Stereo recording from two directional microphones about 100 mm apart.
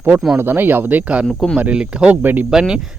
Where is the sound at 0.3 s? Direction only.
20° right (ahead or behind).